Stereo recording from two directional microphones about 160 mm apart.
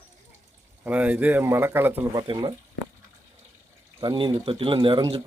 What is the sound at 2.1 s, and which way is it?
Speech, 30° right (ahead or behind).